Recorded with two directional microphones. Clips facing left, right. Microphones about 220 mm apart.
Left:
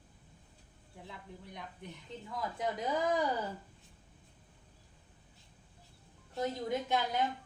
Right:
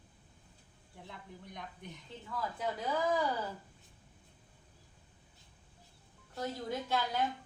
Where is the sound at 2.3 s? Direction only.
15° left (ahead or behind).